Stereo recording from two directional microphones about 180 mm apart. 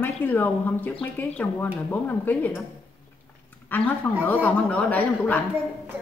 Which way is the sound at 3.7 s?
10° left (ahead or behind).